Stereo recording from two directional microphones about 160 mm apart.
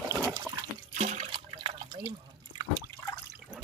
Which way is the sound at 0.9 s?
45° right (ahead or behind).